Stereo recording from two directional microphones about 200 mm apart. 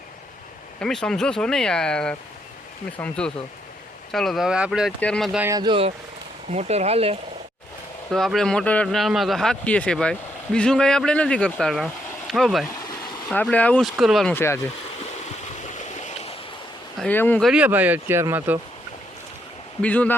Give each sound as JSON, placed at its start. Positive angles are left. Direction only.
{"t": 0.8, "sound": "speech", "side_deg": 5}
{"t": 5.5, "sound": "speech", "side_deg": -20}
{"t": 8.1, "sound": "speech", "side_deg": 0}
{"t": 16.0, "sound": "a sound", "side_deg": 35}
{"t": 17.0, "sound": "speech", "side_deg": 10}
{"t": 17.5, "sound": "speech", "side_deg": -5}
{"t": 19.8, "sound": "speech", "side_deg": 5}